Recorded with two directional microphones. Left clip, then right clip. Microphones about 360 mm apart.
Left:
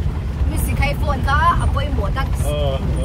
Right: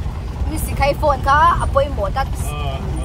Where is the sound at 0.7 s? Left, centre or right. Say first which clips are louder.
Right 7 dB; centre.